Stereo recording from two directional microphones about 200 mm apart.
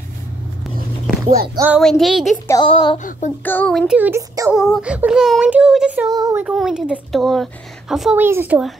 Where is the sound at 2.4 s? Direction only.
20° left (ahead or behind).